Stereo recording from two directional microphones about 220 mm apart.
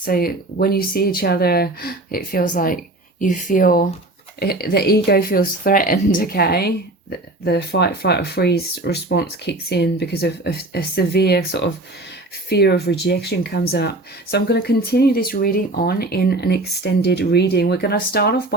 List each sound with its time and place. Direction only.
0.0 s a woman's voice: 40° left (ahead or behind)